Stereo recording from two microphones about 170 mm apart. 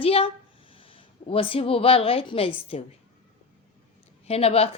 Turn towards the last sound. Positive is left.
turn(degrees=35)  # may be behind; listen again after turning